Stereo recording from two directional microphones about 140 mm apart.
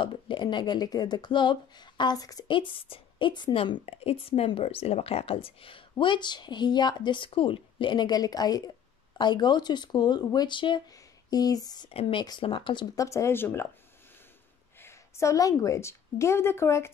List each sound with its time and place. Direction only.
0.0 s speech: 35° left (ahead or behind)
11.9 s speech: 40° left (ahead or behind)
12.9 s speech: 20° left (ahead or behind)
14.8 s a woman's voice: 20° left (ahead or behind)